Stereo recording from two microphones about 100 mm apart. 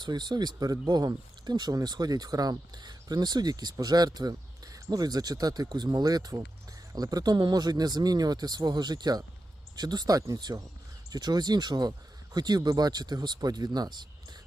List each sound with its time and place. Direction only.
0.0 s speech: 45° right (ahead or behind)